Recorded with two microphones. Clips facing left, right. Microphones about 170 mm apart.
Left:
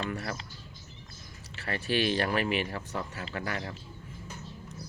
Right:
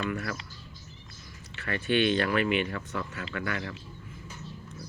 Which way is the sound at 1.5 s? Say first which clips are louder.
Right 1 dB; 30° left (ahead or behind).